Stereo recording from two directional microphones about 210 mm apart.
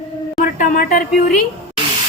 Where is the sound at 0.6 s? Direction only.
45° left (ahead or behind).